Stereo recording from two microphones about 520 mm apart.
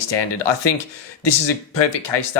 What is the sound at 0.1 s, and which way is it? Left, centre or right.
Speech, left.